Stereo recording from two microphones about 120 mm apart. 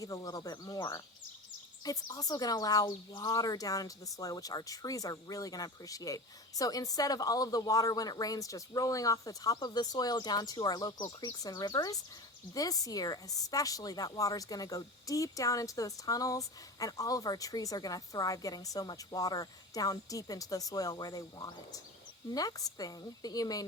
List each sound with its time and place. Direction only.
0.0 s speech: 30° left (ahead or behind)